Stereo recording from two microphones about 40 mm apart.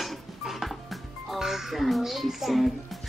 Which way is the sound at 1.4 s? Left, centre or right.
Centre.